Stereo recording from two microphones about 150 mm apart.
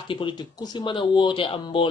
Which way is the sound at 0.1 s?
30° left (ahead or behind).